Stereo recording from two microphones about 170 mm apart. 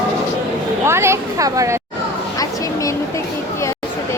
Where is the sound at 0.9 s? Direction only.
15° right (ahead or behind).